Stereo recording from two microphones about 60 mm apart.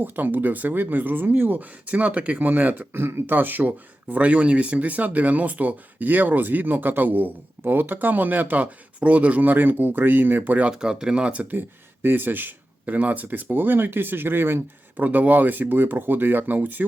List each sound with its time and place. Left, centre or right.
0.0 s speech: right
3.0 s speech: right
10.7 s speech: centre
12.0 s speech: right
14.9 s speech: right